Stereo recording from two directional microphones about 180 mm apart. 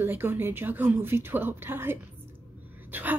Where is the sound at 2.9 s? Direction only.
10° right (ahead or behind).